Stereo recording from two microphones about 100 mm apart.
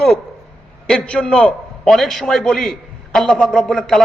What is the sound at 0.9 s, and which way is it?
A man's voice, 10° left (ahead or behind).